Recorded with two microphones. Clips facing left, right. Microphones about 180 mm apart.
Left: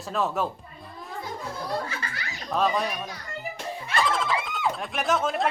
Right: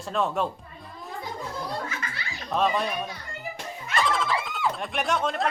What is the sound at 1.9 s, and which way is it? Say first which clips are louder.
Belly laugh: even; 30° left (ahead or behind).